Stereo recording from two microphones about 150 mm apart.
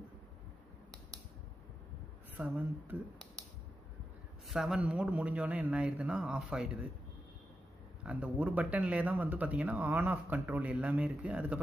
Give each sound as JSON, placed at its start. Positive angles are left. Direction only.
{"t": 2.3, "sound": "speech", "side_deg": -10}
{"t": 4.5, "sound": "speech", "side_deg": -5}
{"t": 8.0, "sound": "speech", "side_deg": -10}